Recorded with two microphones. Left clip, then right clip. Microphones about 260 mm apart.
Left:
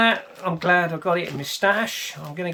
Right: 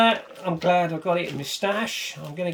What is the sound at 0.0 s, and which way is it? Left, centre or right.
Speech, left.